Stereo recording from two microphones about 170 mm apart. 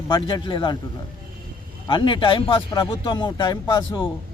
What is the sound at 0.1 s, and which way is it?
Speech, 30° left (ahead or behind).